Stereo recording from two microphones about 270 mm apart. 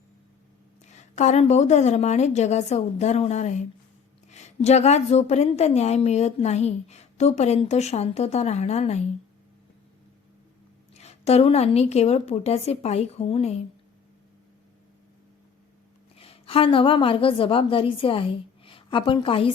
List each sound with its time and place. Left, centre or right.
0.9 s a woman's voice: left
10.9 s a woman's voice: left
16.1 s a woman's voice: left